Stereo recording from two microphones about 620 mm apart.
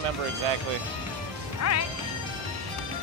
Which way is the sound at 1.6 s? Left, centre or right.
Left.